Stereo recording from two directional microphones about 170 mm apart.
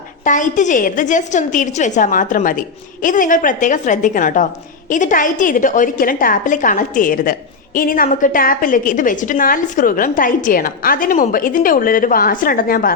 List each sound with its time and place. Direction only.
0.3 s a woman's voice: 45° left (ahead or behind)